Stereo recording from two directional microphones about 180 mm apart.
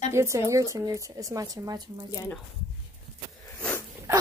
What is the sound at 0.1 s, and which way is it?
A woman's voice, 15° right (ahead or behind).